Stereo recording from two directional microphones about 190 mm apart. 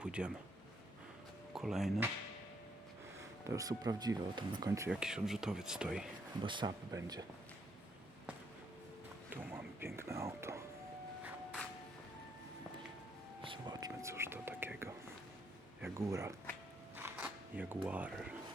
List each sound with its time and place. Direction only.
0.0 s a man's voice: 5° right (ahead or behind)
1.5 s speech: centre (ahead or behind)
3.2 s speech: 15° right (ahead or behind)
4.9 s speech: 5° right (ahead or behind)
6.4 s speech: 25° right (ahead or behind)
9.3 s a sound: 10° right (ahead or behind)
13.4 s whispering: 25° right (ahead or behind)
16.0 s speech: 15° right (ahead or behind)
17.0 s a sound: 10° right (ahead or behind)
17.8 s speech: 10° right (ahead or behind)